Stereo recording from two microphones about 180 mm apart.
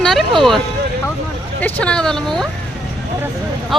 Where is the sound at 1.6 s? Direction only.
5° left (ahead or behind).